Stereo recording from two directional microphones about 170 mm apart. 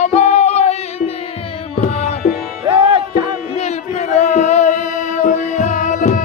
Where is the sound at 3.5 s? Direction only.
40° left (ahead or behind).